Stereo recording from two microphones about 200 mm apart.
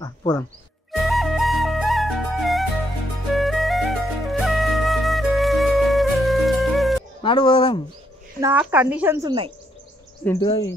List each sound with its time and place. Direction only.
0.0 s a sound: 20° left (ahead or behind)
0.9 s flute: centre (ahead or behind)
7.2 s speech: 25° left (ahead or behind)
8.4 s speech: 10° right (ahead or behind)
10.4 s speech: 25° left (ahead or behind)